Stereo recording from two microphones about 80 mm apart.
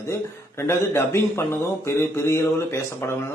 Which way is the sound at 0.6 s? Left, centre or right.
Left.